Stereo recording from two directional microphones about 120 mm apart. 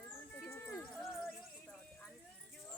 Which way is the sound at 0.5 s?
15° left (ahead or behind).